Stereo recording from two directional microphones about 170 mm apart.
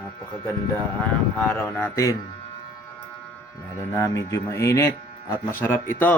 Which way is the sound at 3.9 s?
20° left (ahead or behind).